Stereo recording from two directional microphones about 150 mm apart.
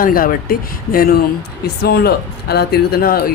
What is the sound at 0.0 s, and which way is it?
Speech, 70° left (ahead or behind).